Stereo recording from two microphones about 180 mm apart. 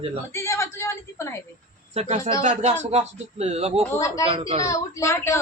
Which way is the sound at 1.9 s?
40° right (ahead or behind).